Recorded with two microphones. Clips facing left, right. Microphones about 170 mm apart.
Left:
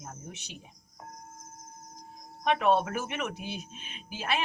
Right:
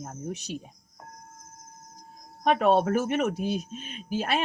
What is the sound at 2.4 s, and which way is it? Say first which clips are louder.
Speech: right 4 dB; 45° right (ahead or behind).